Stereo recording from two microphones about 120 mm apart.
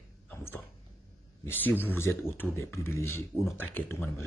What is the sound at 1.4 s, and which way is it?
A man's voice, 15° left (ahead or behind).